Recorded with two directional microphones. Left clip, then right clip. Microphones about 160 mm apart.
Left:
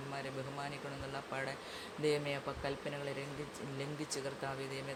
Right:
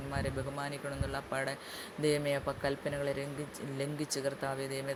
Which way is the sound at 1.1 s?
35° right (ahead or behind).